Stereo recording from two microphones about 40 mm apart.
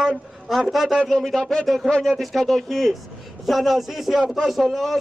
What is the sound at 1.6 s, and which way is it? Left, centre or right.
A man's voice, centre.